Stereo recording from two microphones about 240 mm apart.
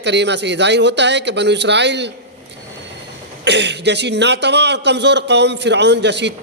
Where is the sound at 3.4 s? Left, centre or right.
Right.